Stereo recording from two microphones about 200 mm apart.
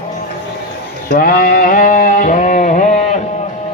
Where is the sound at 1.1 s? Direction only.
45° left (ahead or behind).